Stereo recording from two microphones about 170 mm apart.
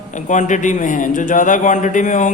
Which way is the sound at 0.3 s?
45° left (ahead or behind).